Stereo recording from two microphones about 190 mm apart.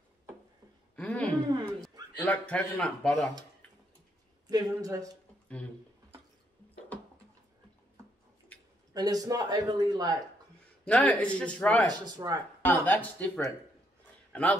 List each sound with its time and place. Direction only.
0.9 s a sound: 5° left (ahead or behind)
2.2 s a man's voice: 5° left (ahead or behind)
4.5 s speech: 20° right (ahead or behind)
8.9 s speech: 20° right (ahead or behind)
10.9 s speech: 5° left (ahead or behind)
11.9 s speech: 20° right (ahead or behind)
12.6 s a man's voice: 10° left (ahead or behind)